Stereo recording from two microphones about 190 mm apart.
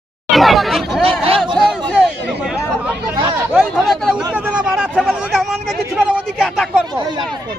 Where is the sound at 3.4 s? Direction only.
5° right (ahead or behind).